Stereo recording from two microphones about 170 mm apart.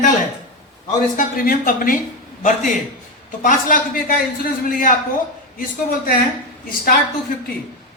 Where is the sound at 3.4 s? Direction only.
50° left (ahead or behind).